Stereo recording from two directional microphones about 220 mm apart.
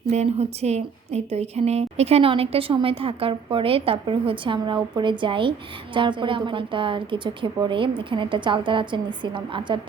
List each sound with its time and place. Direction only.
0.1 s a woman's voice: 30° right (ahead or behind)